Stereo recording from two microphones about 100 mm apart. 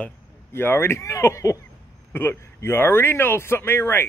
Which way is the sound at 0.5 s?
25° left (ahead or behind).